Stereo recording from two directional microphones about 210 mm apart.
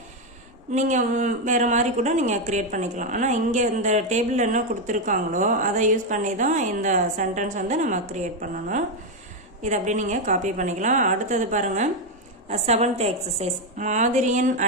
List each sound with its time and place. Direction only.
0.7 s speech: 35° right (ahead or behind)